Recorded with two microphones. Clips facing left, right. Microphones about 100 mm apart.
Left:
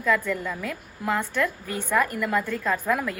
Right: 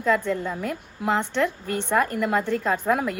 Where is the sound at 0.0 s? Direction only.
25° right (ahead or behind).